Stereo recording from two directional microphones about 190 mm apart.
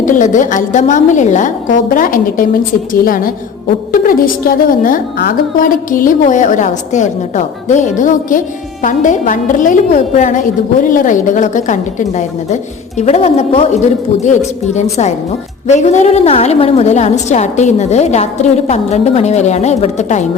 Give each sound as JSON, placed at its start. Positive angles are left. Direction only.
{"t": 0.0, "sound": "a woman's voice", "side_deg": 45}